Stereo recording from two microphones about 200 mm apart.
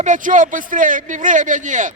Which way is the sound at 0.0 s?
40° right (ahead or behind).